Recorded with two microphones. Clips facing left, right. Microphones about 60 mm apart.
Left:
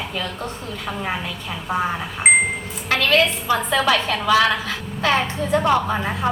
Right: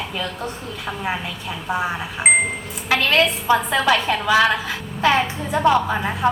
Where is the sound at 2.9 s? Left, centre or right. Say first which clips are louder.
Even; centre.